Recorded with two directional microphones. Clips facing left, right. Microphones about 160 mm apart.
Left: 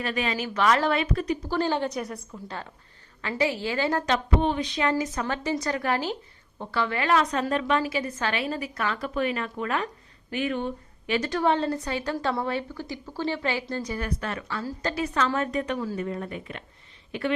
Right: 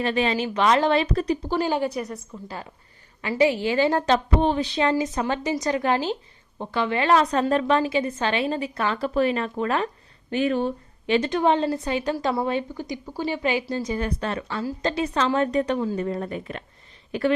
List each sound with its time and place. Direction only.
0.0 s a woman's voice: 30° right (ahead or behind)
1.0 s speech: 35° right (ahead or behind)
1.5 s a woman's voice: 15° right (ahead or behind)
3.2 s a woman's voice: 15° right (ahead or behind); by 17.3 s 40° right (ahead or behind)